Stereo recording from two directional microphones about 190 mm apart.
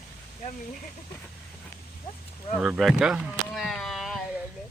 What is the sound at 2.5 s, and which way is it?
Speech, centre (ahead or behind).